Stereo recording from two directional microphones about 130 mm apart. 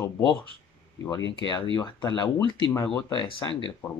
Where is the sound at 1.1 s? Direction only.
35° left (ahead or behind).